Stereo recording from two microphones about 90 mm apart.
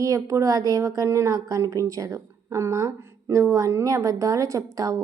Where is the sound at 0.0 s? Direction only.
40° right (ahead or behind).